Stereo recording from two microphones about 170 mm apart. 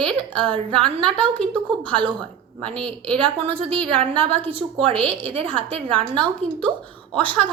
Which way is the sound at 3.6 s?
35° right (ahead or behind).